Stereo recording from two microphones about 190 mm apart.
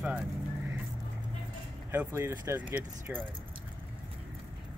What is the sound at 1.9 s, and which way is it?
Speech, 10° right (ahead or behind).